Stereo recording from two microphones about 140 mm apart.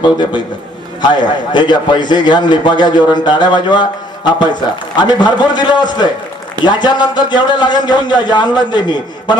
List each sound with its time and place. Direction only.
1.1 s a man's voice: 30° left (ahead or behind)